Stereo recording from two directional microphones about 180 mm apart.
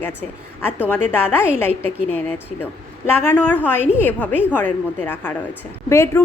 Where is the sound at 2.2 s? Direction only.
10° left (ahead or behind).